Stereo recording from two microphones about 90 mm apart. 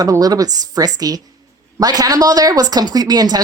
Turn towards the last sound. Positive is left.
turn(degrees=-45)  # may be behind; listen again after turning